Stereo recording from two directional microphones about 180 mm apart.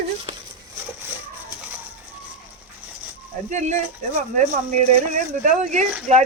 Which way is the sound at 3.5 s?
40° right (ahead or behind).